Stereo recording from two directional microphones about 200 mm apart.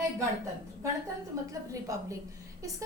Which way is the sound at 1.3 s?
15° right (ahead or behind).